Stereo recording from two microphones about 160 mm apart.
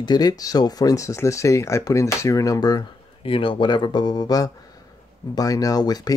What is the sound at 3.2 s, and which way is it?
Speech, 35° left (ahead or behind).